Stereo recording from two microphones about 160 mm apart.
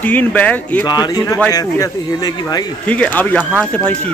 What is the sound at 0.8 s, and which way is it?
Speech, 25° left (ahead or behind).